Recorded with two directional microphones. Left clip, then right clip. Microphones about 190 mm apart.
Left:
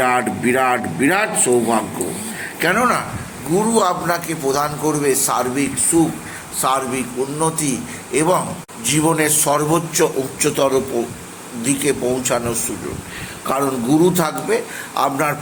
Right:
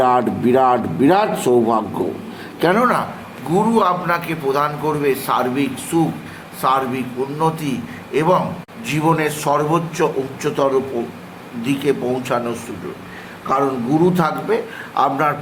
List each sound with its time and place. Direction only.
0.0 s a sound: 10° right (ahead or behind)
0.5 s a man's voice: 5° right (ahead or behind)
3.8 s a man's voice: 15° left (ahead or behind)
5.9 s a man's voice: centre (ahead or behind)